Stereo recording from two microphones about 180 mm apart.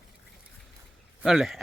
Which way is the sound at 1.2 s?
Centre (ahead or behind).